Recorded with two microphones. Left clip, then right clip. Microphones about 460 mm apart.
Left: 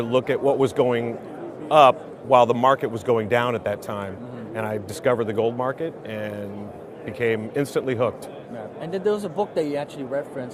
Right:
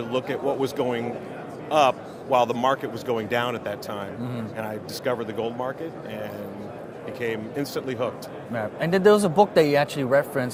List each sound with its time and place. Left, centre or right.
0.0 s a man's voice: left
8.5 s speech: right